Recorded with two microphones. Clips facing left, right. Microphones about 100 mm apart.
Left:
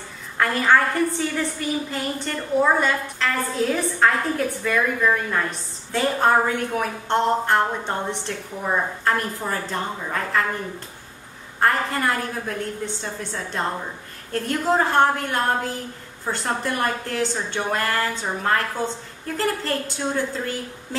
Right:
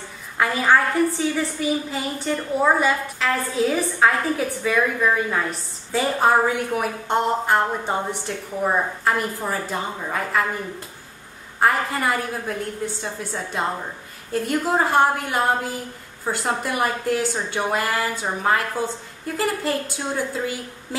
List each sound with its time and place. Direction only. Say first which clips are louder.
0.4 s a woman's voice: even; 5° right (ahead or behind)
11.6 s a woman's voice: right 1 dB; 5° right (ahead or behind)